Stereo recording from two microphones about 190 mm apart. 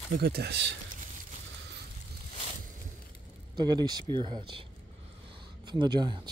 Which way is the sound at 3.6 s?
20° right (ahead or behind).